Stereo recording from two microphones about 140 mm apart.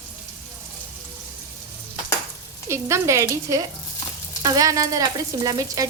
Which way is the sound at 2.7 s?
20° right (ahead or behind).